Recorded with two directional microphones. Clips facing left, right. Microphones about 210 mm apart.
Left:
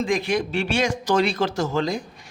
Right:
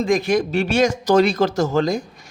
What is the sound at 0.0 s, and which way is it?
A woman's voice, 45° right (ahead or behind).